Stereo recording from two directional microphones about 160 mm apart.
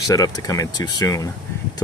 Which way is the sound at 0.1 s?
20° left (ahead or behind).